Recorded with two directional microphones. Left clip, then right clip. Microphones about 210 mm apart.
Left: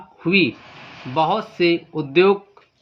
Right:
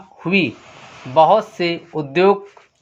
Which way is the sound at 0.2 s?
35° right (ahead or behind).